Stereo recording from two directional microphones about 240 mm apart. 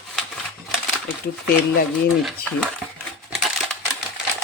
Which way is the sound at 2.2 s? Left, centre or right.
Centre.